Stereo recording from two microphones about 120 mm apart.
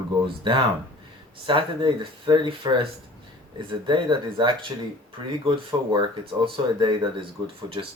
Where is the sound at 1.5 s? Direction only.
45° right (ahead or behind).